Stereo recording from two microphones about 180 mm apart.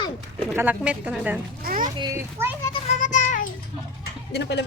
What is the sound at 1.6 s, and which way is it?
Boat, 50° right (ahead or behind).